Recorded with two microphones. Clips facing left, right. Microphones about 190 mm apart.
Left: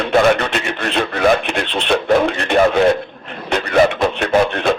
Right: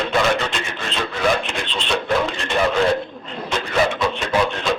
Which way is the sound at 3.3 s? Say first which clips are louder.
Left 6 dB; 60° left (ahead or behind).